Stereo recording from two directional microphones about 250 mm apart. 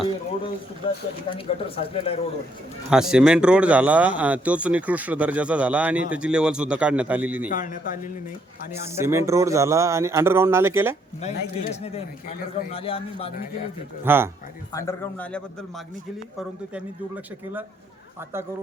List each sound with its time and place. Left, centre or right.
1.5 s speech: left
2.9 s speech: centre
7.5 s a man's voice: left
8.7 s speech: centre
11.2 s speech: left
14.0 s speech: centre
14.7 s speech: centre